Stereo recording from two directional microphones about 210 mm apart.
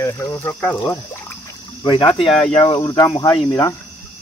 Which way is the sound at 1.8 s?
20° left (ahead or behind).